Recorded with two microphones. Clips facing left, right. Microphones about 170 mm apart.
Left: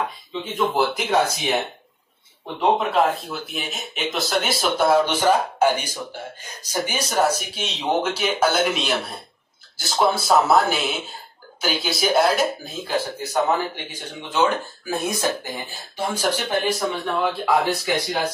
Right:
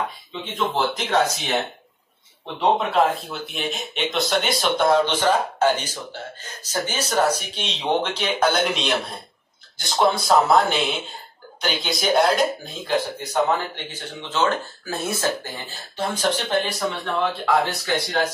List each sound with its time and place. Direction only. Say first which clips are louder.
0.5 s speech: left 2 dB; 10° left (ahead or behind)